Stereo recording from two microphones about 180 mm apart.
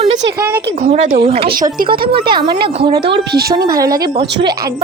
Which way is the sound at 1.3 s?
30° right (ahead or behind).